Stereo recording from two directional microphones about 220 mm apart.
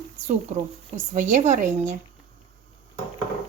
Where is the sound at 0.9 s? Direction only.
35° right (ahead or behind).